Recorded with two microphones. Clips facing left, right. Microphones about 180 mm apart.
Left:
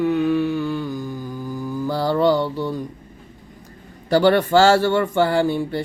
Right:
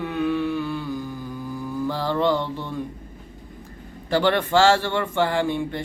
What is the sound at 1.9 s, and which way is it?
Mantra, 40° left (ahead or behind).